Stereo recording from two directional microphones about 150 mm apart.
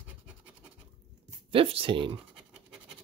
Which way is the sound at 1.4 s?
40° right (ahead or behind).